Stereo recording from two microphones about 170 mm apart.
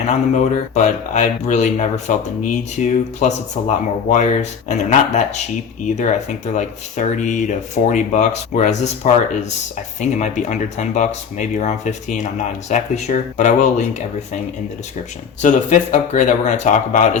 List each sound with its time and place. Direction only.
0.1 s speech: 40° left (ahead or behind)
10.0 s speech: 45° left (ahead or behind)
15.4 s speech: 50° left (ahead or behind)